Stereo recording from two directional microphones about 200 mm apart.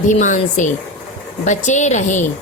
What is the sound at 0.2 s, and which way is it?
Speech, 40° left (ahead or behind).